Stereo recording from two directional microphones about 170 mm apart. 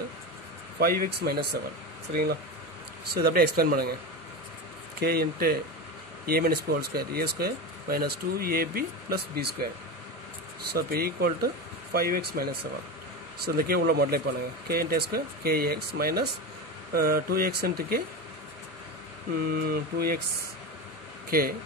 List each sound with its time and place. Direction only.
0.7 s speech: 60° right (ahead or behind)
3.1 s speech: 60° right (ahead or behind)
5.0 s speech: 65° right (ahead or behind)
10.7 s speech: 65° right (ahead or behind)
19.5 s speech: 60° right (ahead or behind)
21.3 s speech: 60° right (ahead or behind)